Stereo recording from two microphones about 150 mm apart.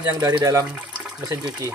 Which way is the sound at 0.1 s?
25° right (ahead or behind).